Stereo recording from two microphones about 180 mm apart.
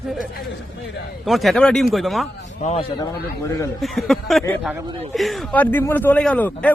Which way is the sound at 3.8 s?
Centre (ahead or behind).